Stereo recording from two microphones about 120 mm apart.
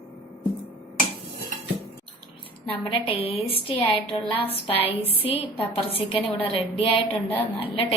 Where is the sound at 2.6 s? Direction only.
50° left (ahead or behind).